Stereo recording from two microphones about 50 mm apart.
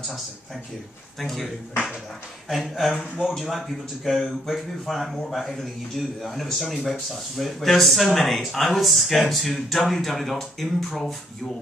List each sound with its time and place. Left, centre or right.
1.2 s speech: centre
2.5 s speech: centre